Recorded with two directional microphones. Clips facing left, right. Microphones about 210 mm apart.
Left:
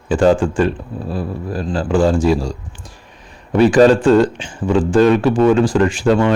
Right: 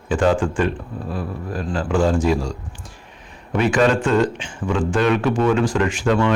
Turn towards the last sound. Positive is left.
turn(degrees=35)  # may be behind; listen again after turning